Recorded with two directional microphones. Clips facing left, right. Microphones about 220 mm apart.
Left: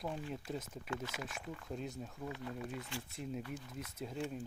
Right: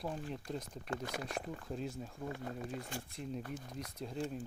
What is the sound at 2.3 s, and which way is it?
Speech, 45° right (ahead or behind).